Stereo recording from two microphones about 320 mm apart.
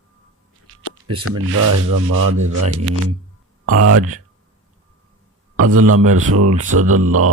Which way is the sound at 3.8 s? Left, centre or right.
Right.